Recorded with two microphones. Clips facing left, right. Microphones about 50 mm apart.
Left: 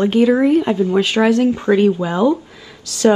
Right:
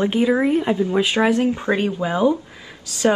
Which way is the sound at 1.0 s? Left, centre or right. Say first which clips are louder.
Left 4 dB; centre.